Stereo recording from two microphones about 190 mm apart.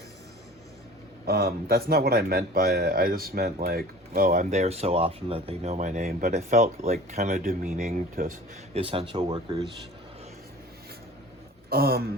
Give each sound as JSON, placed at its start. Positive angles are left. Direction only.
{"t": 1.2, "sound": "speech", "side_deg": -50}
{"t": 4.5, "sound": "speech", "side_deg": -35}
{"t": 8.7, "sound": "speech", "side_deg": -30}
{"t": 11.7, "sound": "speech", "side_deg": -55}